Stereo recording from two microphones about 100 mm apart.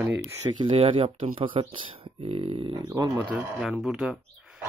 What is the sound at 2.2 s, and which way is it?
Speech, 90° right.